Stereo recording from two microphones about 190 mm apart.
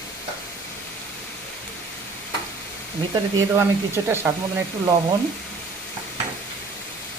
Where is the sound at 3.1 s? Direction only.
15° right (ahead or behind).